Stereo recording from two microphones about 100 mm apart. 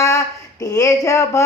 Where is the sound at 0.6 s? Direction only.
35° left (ahead or behind).